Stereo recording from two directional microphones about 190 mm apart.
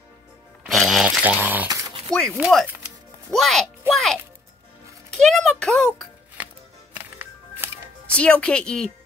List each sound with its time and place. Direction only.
0.7 s a sound: centre (ahead or behind)
1.7 s dog: 20° right (ahead or behind)
2.1 s speech: centre (ahead or behind)
3.9 s music: centre (ahead or behind)
8.1 s speech: 5° left (ahead or behind)